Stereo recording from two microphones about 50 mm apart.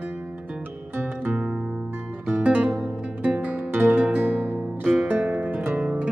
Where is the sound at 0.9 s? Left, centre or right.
Right.